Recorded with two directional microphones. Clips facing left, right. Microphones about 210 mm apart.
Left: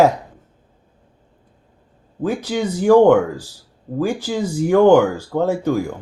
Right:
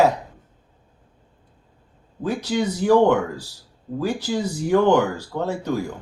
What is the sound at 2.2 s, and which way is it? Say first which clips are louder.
Speech: left 2 dB; 50° left (ahead or behind).